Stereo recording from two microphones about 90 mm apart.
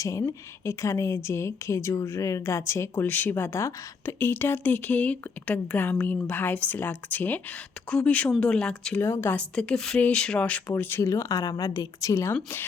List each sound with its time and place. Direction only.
0.0 s a woman's voice: 35° left (ahead or behind); by 9.0 s 10° left (ahead or behind)
9.0 s speech: 30° left (ahead or behind)
9.3 s speech: 15° left (ahead or behind)
10.7 s speech: 25° left (ahead or behind)
11.1 s a woman's voice: 40° left (ahead or behind)